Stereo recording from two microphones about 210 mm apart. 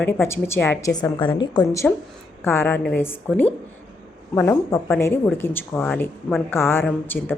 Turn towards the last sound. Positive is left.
turn(degrees=10)  # may be behind; listen again after turning